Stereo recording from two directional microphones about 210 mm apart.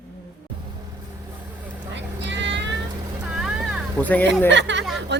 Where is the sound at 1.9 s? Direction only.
60° right (ahead or behind).